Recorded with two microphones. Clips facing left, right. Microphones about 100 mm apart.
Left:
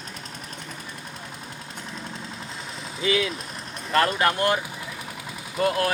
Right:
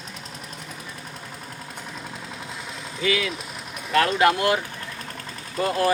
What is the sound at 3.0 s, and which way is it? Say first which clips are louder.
Speech: left 1 dB; 30° left (ahead or behind).